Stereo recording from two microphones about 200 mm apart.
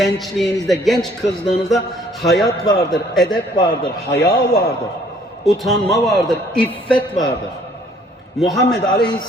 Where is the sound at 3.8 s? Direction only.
55° left (ahead or behind).